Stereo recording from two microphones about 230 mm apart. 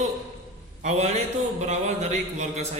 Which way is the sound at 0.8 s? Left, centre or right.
Right.